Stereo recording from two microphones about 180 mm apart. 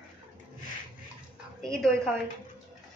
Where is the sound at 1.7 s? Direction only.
5° left (ahead or behind).